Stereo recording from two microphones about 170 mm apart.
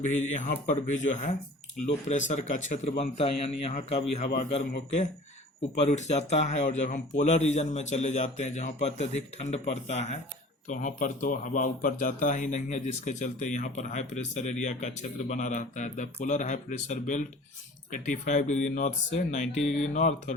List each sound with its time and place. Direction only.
0.1 s a man's voice: 45° left (ahead or behind)
5.8 s speech: 40° left (ahead or behind)